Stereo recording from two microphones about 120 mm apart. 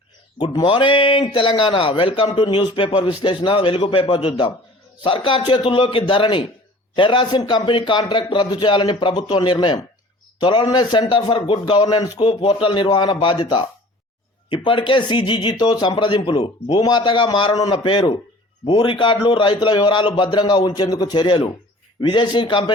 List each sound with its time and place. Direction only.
0.3 s a man's voice: 40° left (ahead or behind)